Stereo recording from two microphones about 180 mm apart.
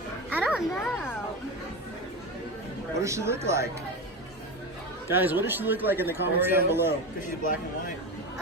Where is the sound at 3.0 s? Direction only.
15° right (ahead or behind).